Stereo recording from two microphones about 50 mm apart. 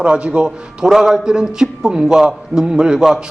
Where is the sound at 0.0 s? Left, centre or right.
Right.